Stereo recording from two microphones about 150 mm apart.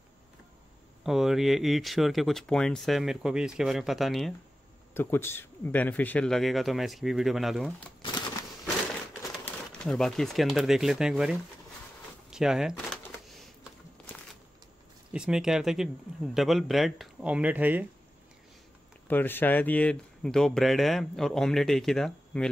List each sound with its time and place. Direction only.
1.0 s speech: centre (ahead or behind)
4.9 s speech: 15° left (ahead or behind); by 7.7 s centre (ahead or behind)
9.4 s speech: 5° left (ahead or behind)
12.3 s a sound: 5° right (ahead or behind)
15.1 s speech: 5° right (ahead or behind)
19.0 s speech: 15° left (ahead or behind)